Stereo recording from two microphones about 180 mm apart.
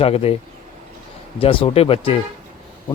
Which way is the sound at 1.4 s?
30° left (ahead or behind).